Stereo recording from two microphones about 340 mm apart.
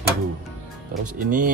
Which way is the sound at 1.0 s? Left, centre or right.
Right.